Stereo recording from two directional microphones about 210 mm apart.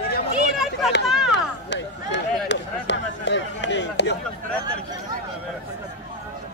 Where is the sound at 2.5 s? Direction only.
55° left (ahead or behind).